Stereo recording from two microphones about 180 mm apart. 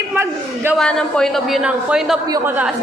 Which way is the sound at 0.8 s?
5° left (ahead or behind).